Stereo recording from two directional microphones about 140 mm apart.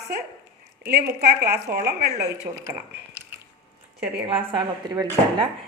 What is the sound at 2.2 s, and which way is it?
Speech, 20° right (ahead or behind).